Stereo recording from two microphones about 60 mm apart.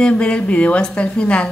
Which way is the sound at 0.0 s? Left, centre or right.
Centre.